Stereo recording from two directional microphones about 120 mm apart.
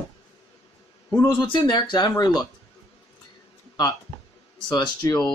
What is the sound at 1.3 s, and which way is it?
Speech, 35° left (ahead or behind).